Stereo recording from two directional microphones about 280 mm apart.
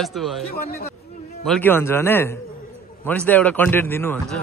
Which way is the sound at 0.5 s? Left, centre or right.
Left.